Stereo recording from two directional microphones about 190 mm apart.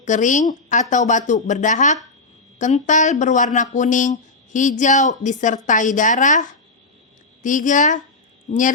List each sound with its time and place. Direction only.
0.0 s a woman's voice: 40° left (ahead or behind)